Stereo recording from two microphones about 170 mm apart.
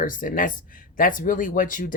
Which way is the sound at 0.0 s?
50° left (ahead or behind).